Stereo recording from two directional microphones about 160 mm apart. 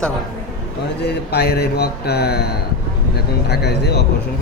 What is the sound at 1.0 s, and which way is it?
Speech, 85° left.